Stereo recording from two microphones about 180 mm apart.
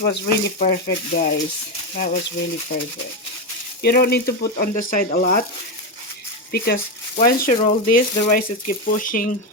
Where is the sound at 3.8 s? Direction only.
60° left (ahead or behind).